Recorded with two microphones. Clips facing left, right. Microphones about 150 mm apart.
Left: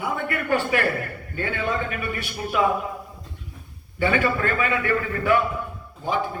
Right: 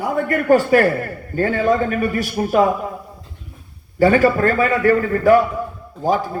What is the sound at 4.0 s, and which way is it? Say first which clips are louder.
A man's voice: right 9 dB; 40° right (ahead or behind).